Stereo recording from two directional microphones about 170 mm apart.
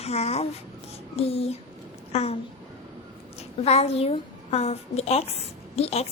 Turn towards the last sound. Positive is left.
turn(degrees=35)  # may be behind; listen again after turning